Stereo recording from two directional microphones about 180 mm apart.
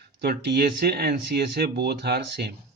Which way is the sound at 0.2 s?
60° right (ahead or behind).